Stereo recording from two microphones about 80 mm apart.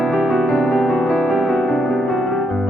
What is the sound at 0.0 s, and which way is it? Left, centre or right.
Music, centre.